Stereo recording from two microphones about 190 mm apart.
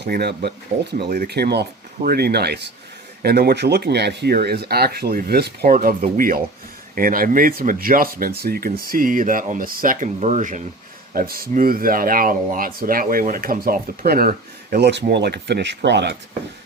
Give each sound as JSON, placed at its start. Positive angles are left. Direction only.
{"t": 0.0, "sound": "speech", "side_deg": -55}
{"t": 11.1, "sound": "speech", "side_deg": -50}